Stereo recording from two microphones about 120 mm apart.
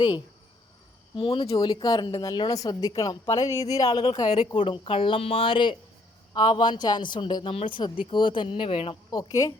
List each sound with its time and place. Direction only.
1.1 s speech: 45° left (ahead or behind)
1.5 s speech: 35° left (ahead or behind); by 9.0 s 50° left (ahead or behind)
9.0 s speech: 35° left (ahead or behind)